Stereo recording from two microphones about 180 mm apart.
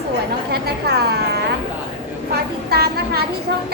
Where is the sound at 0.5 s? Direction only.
60° right (ahead or behind).